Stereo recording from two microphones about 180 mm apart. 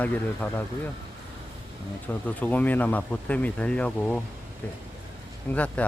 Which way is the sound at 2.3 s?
10° left (ahead or behind).